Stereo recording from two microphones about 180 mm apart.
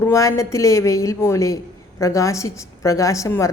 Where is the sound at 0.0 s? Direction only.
15° left (ahead or behind).